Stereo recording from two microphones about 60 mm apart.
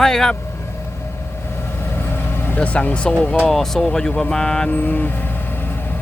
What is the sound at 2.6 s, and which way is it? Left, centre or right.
Speech, left.